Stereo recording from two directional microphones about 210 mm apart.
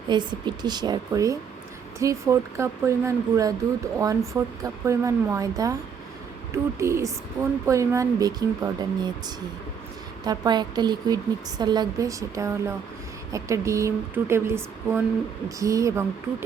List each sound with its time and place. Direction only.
0.1 s a woman's voice: 20° right (ahead or behind)
10.2 s a woman's voice: 20° right (ahead or behind)